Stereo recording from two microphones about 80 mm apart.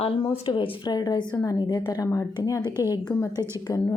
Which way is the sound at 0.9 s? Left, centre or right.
Left.